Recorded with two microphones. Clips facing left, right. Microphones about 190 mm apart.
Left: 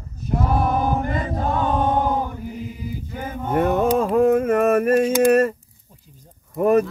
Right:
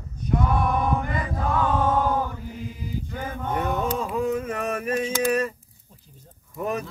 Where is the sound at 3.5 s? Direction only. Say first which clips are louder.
Left 8 dB; 50° left (ahead or behind).